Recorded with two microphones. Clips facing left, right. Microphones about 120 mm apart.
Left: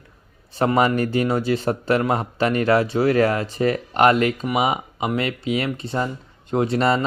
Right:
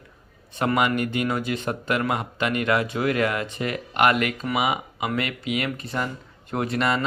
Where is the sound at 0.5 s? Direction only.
30° left (ahead or behind).